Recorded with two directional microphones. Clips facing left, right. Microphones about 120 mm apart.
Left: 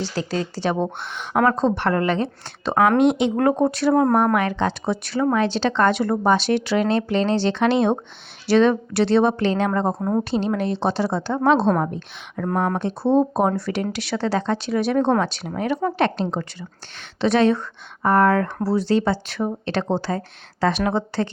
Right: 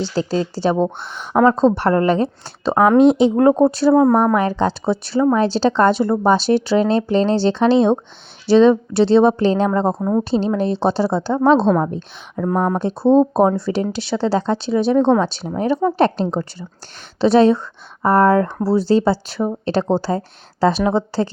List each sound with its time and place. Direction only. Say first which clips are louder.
0.0 s speech: right 5 dB; 30° right (ahead or behind)
1.2 s a woman's voice: right 5 dB; centre (ahead or behind)
1.6 s speech: right 5 dB; 35° right (ahead or behind)
4.0 s a woman's voice: right 4 dB; centre (ahead or behind)
4.4 s speech: right 4 dB; 35° right (ahead or behind)
11.5 s a woman's voice: right 4 dB; centre (ahead or behind)
13.1 s speech: right 5 dB; 30° right (ahead or behind)
14.9 s a woman's voice: right 5 dB; centre (ahead or behind)
15.2 s speech: right 4 dB; 30° right (ahead or behind)